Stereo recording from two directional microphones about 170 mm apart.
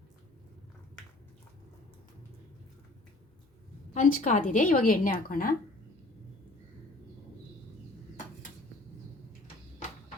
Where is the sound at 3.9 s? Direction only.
45° left (ahead or behind).